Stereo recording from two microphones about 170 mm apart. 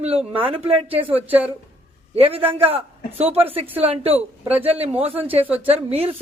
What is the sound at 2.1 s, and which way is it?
Speech, 35° right (ahead or behind).